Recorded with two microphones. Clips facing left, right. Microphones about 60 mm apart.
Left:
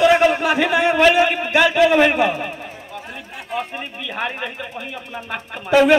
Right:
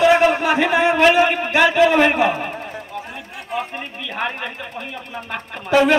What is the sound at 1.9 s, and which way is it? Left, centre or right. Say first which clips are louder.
Speech: even; centre.